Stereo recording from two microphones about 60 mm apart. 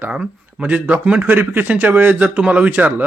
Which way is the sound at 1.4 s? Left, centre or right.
Right.